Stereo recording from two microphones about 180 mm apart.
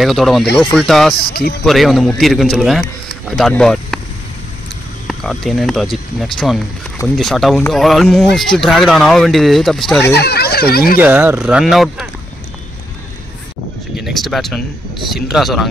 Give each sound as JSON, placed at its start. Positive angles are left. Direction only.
{"t": 0.0, "sound": "speech", "side_deg": 0}
{"t": 1.1, "sound": "speech", "side_deg": 60}
{"t": 1.7, "sound": "speech", "side_deg": 0}
{"t": 5.0, "sound": "speech", "side_deg": 0}
{"t": 10.0, "sound": "speech", "side_deg": 65}
{"t": 11.0, "sound": "speech", "side_deg": -10}
{"t": 14.0, "sound": "speech", "side_deg": 0}